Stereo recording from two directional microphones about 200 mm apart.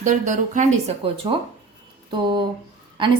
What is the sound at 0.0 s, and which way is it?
A woman's voice, 40° right (ahead or behind).